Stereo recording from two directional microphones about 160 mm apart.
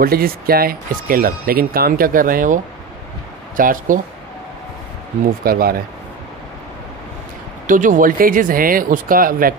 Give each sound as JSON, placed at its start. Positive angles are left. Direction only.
{"t": 0.0, "sound": "speech", "side_deg": -70}
{"t": 5.4, "sound": "speech", "side_deg": -70}
{"t": 7.6, "sound": "speech", "side_deg": -55}